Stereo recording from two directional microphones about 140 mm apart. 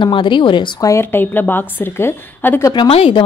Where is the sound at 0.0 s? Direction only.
35° left (ahead or behind); by 2.7 s 15° left (ahead or behind).